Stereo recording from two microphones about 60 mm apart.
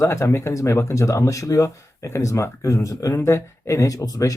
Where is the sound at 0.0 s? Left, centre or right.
Left.